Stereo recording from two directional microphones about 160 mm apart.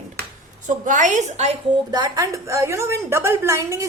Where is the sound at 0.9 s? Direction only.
50° right (ahead or behind).